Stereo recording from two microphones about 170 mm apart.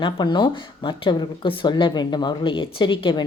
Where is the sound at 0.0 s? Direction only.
25° left (ahead or behind).